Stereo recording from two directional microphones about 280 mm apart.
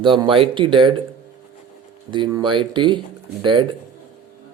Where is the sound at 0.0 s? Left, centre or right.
Centre.